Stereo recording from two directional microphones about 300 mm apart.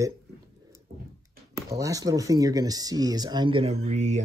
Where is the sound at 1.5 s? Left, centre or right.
Centre.